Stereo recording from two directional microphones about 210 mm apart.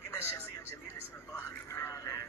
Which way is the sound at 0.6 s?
10° left (ahead or behind).